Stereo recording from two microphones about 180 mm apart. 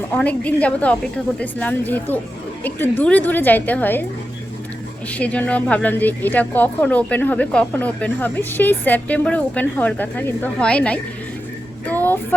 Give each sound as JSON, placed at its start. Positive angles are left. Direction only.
{"t": 0.1, "sound": "speech", "side_deg": 5}
{"t": 5.1, "sound": "speech", "side_deg": 5}